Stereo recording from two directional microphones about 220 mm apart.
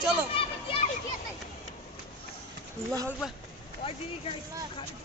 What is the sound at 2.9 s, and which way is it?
Speech, 15° right (ahead or behind).